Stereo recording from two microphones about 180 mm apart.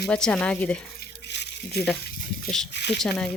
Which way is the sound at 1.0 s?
70° left (ahead or behind).